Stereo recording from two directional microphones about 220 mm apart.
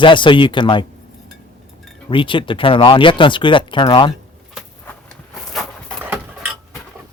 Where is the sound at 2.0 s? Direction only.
25° left (ahead or behind).